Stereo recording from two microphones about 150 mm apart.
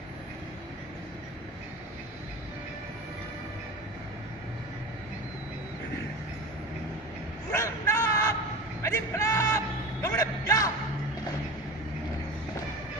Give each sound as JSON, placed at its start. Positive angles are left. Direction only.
{"t": 7.5, "sound": "a sound", "side_deg": 20}
{"t": 8.8, "sound": "music", "side_deg": 20}
{"t": 10.0, "sound": "a man's voice", "side_deg": 20}